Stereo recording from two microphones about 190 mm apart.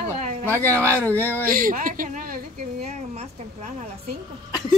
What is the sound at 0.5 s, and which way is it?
Speech, 10° left (ahead or behind).